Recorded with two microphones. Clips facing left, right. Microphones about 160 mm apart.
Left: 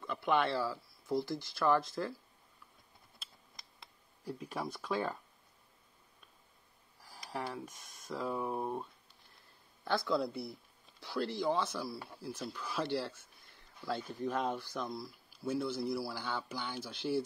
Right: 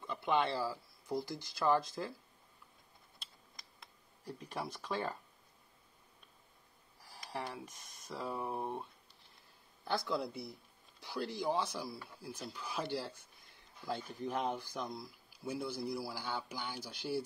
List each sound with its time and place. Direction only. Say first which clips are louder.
0.0 s speech: left 2 dB; 20° right (ahead or behind)
4.3 s speech: left 3 dB; centre (ahead or behind)
7.0 s speech: left 2 dB; centre (ahead or behind)
9.9 s speech: left 4 dB; 15° right (ahead or behind)
14.2 s speech: left 2 dB; 15° right (ahead or behind)